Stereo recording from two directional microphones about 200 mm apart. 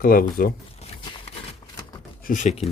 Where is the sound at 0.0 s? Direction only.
45° left (ahead or behind).